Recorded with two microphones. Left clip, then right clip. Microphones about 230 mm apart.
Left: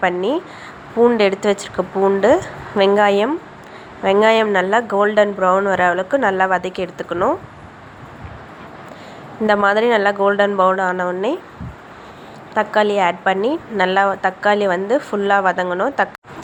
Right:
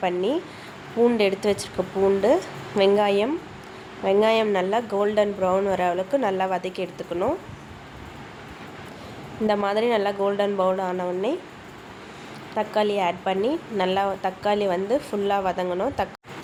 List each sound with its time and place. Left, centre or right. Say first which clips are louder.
0.0 s a woman's voice: left 6 dB; centre
9.5 s a woman's voice: left 8 dB; centre
12.5 s a woman's voice: left 7 dB; centre